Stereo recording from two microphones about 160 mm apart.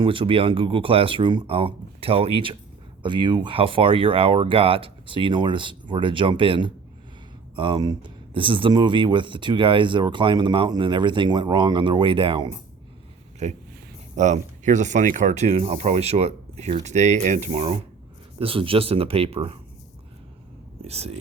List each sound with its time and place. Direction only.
0.0 s speech: 35° right (ahead or behind)
13.4 s speech: 45° right (ahead or behind)
20.8 s speech: 40° right (ahead or behind)